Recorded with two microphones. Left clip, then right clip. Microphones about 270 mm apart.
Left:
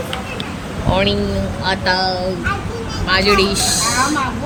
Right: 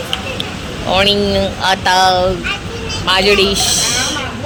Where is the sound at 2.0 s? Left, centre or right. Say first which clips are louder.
Right 8 dB; centre.